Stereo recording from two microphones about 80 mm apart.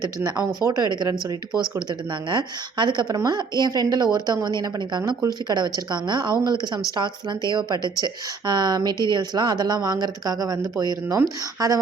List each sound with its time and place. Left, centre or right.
0.2 s speech: right
0.8 s a woman's voice: right